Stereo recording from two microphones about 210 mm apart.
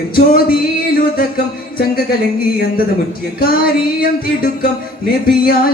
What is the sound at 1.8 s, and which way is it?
Music, 45° left (ahead or behind).